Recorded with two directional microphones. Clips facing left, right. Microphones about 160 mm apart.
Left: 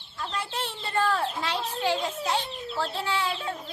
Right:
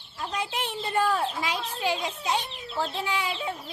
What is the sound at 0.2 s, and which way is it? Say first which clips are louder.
Speech: right 1 dB; 15° right (ahead or behind).